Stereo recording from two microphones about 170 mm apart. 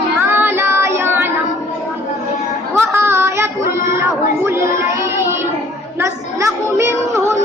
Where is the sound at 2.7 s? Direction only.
15° right (ahead or behind).